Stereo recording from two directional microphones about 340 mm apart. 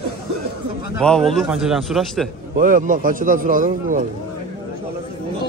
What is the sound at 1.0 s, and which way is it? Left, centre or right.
A man's voice, centre.